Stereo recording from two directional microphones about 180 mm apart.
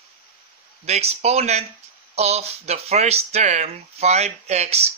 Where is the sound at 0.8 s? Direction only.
35° right (ahead or behind).